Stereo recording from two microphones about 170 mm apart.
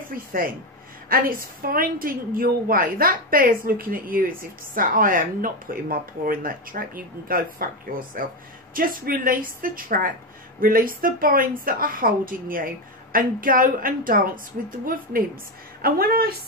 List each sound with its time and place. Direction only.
0.1 s a woman's voice: 55° right (ahead or behind)
15.8 s a woman's voice: 65° right (ahead or behind)